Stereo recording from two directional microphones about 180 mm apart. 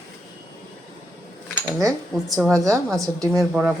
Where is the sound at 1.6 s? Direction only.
20° right (ahead or behind).